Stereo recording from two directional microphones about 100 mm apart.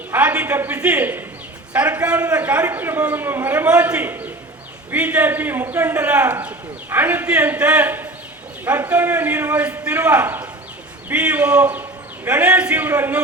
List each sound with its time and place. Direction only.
0.1 s a man's voice: 15° right (ahead or behind)